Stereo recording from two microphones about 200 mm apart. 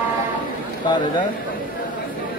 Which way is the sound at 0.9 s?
25° left (ahead or behind).